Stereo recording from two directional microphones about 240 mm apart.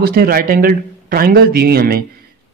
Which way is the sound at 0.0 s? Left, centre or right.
Right.